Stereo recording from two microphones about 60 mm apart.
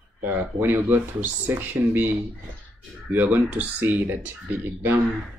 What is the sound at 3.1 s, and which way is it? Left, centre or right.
Speech, right.